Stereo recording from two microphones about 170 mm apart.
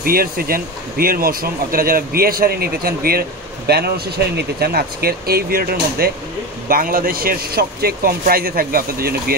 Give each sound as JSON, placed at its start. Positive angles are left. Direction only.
{"t": 0.0, "sound": "speech", "side_deg": -60}